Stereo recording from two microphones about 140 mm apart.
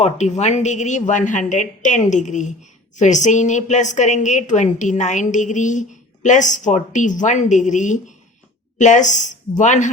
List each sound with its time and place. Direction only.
0.0 s a woman's voice: 55° left (ahead or behind)